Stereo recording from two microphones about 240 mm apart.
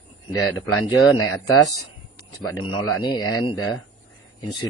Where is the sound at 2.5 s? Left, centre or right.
Left.